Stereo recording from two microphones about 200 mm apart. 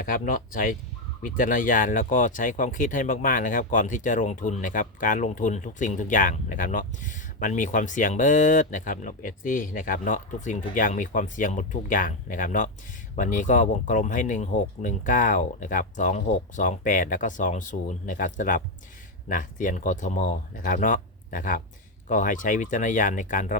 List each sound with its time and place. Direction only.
0.0 s speech: 45° left (ahead or behind)